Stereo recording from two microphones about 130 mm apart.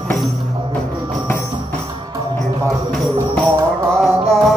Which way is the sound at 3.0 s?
Centre (ahead or behind).